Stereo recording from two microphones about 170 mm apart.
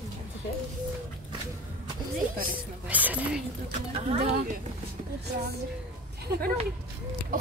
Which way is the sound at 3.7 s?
40° right (ahead or behind).